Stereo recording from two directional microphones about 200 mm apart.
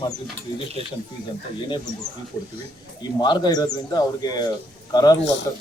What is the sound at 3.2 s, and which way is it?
Speech, 20° left (ahead or behind).